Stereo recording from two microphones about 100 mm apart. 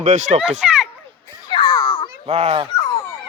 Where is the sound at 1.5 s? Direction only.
50° left (ahead or behind).